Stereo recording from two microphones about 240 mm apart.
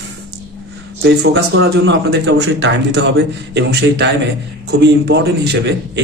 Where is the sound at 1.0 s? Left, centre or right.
Right.